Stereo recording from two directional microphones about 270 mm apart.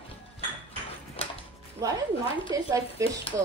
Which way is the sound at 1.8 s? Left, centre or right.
Centre.